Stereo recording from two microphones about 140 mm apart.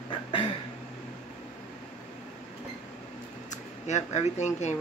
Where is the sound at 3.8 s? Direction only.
55° left (ahead or behind).